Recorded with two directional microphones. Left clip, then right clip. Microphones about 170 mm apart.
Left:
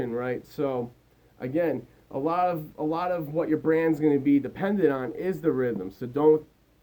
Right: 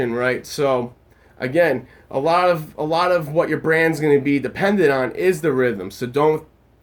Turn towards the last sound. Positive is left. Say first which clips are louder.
# right 3 dB
turn(degrees=-25)  # may be behind; listen again after turning